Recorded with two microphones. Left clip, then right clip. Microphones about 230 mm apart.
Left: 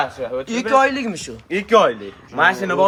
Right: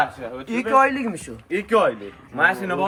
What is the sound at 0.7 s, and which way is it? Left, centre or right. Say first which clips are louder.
Speech: left 2 dB; centre.